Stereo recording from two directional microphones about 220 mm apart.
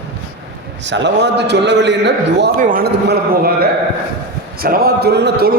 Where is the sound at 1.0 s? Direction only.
50° right (ahead or behind).